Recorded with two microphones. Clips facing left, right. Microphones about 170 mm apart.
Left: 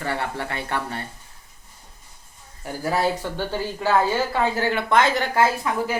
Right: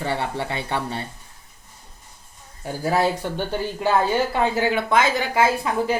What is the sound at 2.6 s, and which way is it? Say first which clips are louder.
Speech: right 2 dB; 20° right (ahead or behind).